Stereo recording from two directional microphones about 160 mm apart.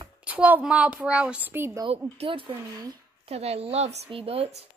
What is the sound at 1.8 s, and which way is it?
Speech, 35° right (ahead or behind).